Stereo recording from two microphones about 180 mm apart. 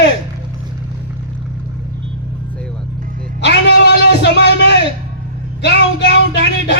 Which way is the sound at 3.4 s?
70° left (ahead or behind).